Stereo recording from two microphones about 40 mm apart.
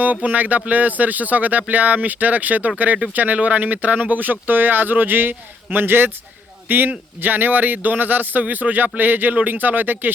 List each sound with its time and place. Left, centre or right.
0.0 s speech: right
6.7 s speech: right